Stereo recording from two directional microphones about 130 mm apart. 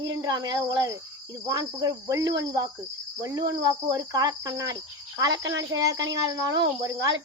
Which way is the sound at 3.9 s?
30° right (ahead or behind).